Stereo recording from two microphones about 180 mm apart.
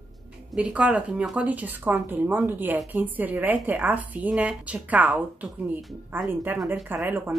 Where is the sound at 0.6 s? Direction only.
5° right (ahead or behind).